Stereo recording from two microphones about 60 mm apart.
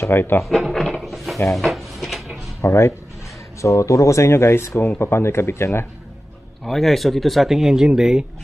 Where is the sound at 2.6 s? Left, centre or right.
Left.